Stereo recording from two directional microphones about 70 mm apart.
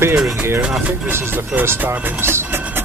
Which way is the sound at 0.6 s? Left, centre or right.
Centre.